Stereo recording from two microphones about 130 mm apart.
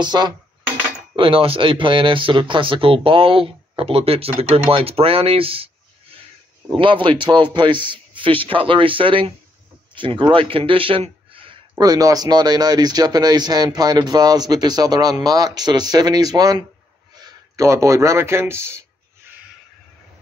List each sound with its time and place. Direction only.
0.0 s speech: 35° right (ahead or behind)
6.8 s speech: 40° right (ahead or behind)
11.8 s speech: 30° right (ahead or behind)